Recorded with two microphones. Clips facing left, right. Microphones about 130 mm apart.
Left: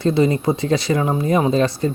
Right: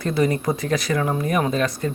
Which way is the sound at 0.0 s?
25° left (ahead or behind).